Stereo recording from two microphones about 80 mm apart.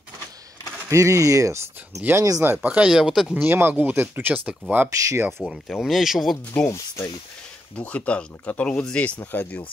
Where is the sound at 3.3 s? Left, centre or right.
Right.